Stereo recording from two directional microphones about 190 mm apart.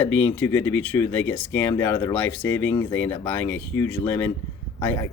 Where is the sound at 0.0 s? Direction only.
10° left (ahead or behind).